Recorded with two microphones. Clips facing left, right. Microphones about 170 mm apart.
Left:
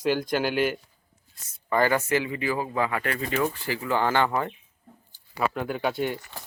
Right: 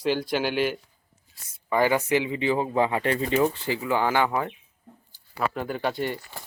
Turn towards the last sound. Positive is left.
turn(degrees=0)  # may be behind; listen again after turning